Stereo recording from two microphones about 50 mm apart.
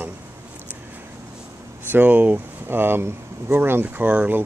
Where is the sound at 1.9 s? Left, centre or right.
Right.